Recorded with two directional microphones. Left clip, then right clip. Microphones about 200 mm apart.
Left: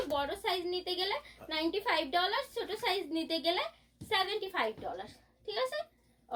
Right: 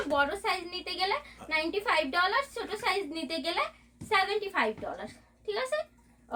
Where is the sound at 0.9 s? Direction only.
20° right (ahead or behind).